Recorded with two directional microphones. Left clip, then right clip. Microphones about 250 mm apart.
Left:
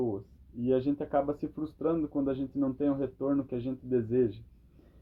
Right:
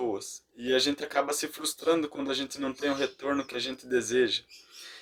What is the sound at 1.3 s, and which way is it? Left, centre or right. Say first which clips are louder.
Speech: right 3 dB; centre.